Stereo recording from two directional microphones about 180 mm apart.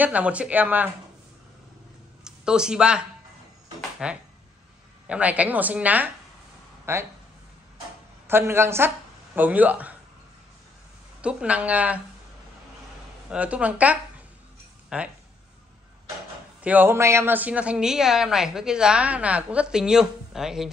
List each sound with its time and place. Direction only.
0.0 s a woman's voice: 10° right (ahead or behind)
2.2 s a woman's voice: 5° right (ahead or behind)
8.3 s speech: 15° right (ahead or behind)
11.1 s a woman's voice: 5° right (ahead or behind)
13.3 s a woman's voice: 5° right (ahead or behind)
16.6 s a woman's voice: 10° right (ahead or behind)